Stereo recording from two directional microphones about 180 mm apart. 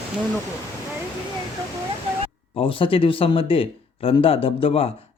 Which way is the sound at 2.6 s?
30° left (ahead or behind).